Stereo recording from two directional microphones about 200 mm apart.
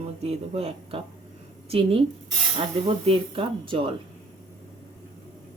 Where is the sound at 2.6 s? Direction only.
30° right (ahead or behind).